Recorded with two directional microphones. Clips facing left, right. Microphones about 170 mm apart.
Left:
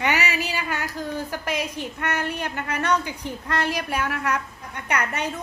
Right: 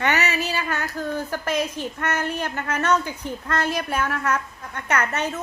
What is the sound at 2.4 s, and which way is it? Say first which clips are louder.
Speech: right 2 dB; 45° right (ahead or behind).